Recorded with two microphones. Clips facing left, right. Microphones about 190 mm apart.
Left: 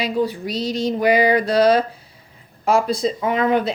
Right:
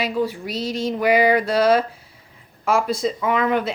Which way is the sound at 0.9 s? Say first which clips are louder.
Even; 35° left (ahead or behind).